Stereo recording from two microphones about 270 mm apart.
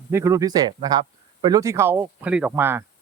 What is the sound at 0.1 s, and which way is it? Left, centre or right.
Speech, centre.